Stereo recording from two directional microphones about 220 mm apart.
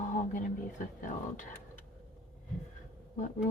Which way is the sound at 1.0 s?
35° left (ahead or behind).